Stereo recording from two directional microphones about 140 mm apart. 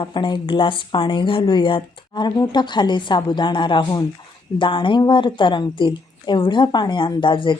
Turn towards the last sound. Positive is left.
turn(degrees=35)  # may be behind; listen again after turning